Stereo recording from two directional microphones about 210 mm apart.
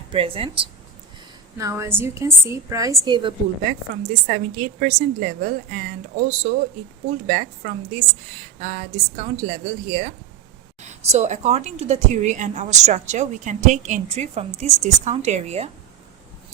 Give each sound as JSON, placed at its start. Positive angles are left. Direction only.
{"t": 0.1, "sound": "speech", "side_deg": -25}
{"t": 1.5, "sound": "a woman's voice", "side_deg": -15}
{"t": 4.1, "sound": "a woman's voice", "side_deg": -35}